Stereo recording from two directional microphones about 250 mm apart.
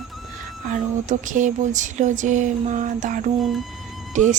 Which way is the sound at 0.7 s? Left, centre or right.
Right.